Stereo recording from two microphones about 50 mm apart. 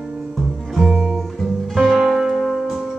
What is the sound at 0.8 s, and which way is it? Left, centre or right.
Music, centre.